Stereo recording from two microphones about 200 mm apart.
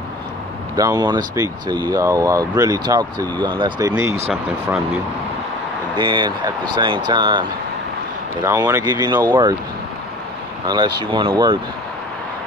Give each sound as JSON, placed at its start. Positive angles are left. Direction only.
{"t": 0.7, "sound": "speech", "side_deg": -20}
{"t": 5.9, "sound": "speech", "side_deg": -25}
{"t": 11.0, "sound": "speech", "side_deg": -25}